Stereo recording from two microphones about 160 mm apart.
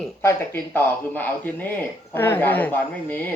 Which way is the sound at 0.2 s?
15° left (ahead or behind).